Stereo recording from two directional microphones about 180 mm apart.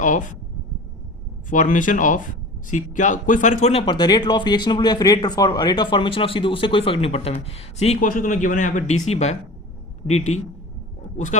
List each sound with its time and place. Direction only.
0.0 s a man's voice: 45° left (ahead or behind)
1.5 s speech: 45° left (ahead or behind)
8.0 s a man's voice: 50° left (ahead or behind)